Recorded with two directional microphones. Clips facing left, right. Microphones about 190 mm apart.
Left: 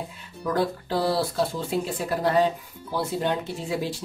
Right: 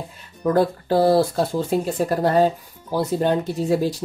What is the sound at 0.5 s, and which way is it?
Speech, 45° right (ahead or behind).